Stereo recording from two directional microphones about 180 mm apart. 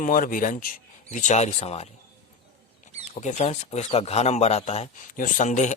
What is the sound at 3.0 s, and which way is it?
Speech, 40° left (ahead or behind).